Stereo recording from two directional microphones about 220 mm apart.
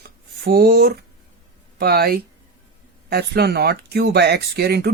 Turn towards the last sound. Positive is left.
turn(degrees=-45)  # may be behind; listen again after turning